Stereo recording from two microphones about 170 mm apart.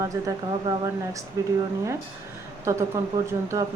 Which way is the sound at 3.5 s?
20° right (ahead or behind).